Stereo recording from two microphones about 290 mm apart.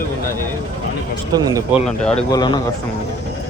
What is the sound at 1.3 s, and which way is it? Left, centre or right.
Speech, centre.